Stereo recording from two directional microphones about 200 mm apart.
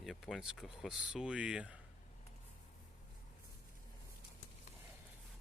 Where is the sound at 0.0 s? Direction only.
Centre (ahead or behind).